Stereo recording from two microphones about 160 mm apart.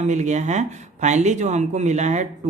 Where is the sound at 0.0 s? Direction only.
50° right (ahead or behind).